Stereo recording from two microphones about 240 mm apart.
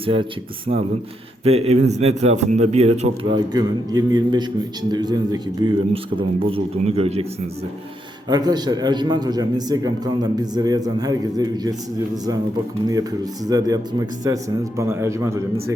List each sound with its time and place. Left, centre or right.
0.0 s speech: right
1.5 s a man's voice: right
8.3 s a man's voice: centre
13.5 s a man's voice: centre